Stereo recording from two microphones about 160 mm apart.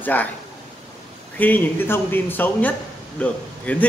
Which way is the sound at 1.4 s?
10° left (ahead or behind).